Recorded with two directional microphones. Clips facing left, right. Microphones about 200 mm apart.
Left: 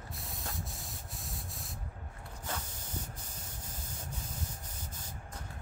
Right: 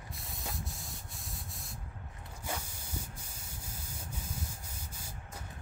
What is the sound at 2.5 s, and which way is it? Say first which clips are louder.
Spray: right 1 dB; 10° right (ahead or behind).